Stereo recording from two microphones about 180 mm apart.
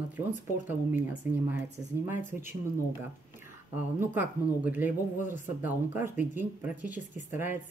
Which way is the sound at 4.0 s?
10° right (ahead or behind).